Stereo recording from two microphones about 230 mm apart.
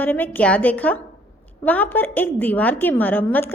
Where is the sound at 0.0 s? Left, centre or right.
Centre.